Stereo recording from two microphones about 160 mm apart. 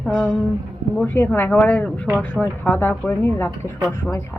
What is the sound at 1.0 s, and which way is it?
Speech, 10° left (ahead or behind).